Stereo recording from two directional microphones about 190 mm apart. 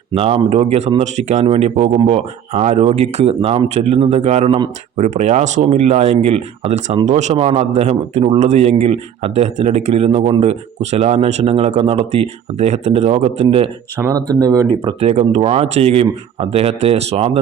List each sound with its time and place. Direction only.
0.1 s speech: 30° right (ahead or behind)
4.9 s speech: 40° right (ahead or behind)
14.0 s speech: 20° right (ahead or behind)
15.0 s speech: 35° right (ahead or behind)